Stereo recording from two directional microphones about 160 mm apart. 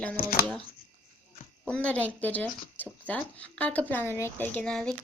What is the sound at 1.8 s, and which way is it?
Speech, 10° left (ahead or behind).